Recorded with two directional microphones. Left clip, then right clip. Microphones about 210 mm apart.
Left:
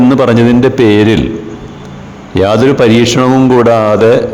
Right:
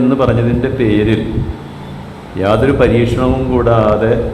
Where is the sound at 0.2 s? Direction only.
45° left (ahead or behind).